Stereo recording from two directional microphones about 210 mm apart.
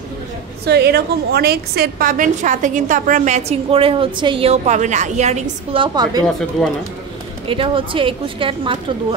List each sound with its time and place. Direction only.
0.7 s a woman's voice: 50° right (ahead or behind); by 6.2 s 20° right (ahead or behind)
7.4 s a woman's voice: 25° right (ahead or behind)